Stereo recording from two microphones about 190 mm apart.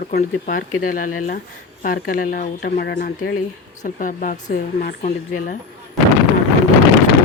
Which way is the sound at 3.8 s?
45° left (ahead or behind).